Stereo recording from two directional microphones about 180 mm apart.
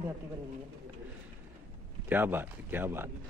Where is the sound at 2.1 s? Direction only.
10° right (ahead or behind).